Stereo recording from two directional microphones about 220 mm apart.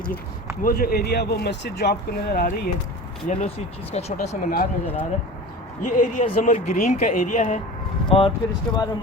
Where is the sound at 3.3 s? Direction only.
30° left (ahead or behind).